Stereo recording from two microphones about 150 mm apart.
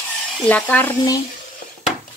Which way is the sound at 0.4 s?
10° left (ahead or behind).